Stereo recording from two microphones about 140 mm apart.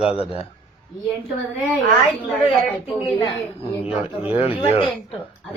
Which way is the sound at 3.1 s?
45° left (ahead or behind).